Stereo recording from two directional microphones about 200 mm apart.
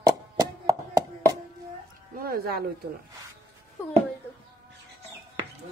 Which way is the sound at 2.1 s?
50° right (ahead or behind).